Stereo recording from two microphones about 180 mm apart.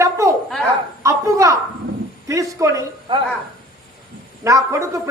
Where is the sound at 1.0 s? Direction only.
20° right (ahead or behind).